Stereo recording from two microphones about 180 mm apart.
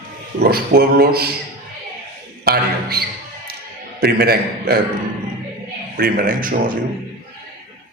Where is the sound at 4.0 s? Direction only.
60° right (ahead or behind).